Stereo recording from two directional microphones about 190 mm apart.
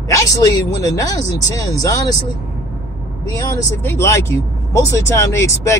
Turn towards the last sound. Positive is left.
turn(degrees=15)  # may be behind; listen again after turning